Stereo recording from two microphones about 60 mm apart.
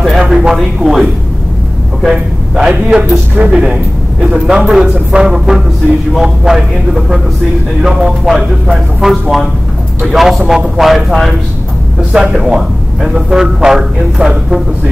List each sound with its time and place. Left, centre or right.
0.2 s speech: centre
2.0 s a man's voice: centre
2.7 s a man's voice: right